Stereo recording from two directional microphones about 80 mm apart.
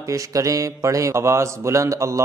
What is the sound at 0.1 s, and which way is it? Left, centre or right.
A man's voice, right.